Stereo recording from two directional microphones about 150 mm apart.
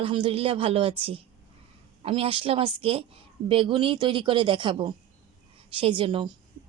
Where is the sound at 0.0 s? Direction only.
35° right (ahead or behind).